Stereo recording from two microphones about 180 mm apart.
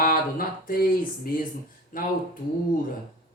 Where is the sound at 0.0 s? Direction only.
50° left (ahead or behind).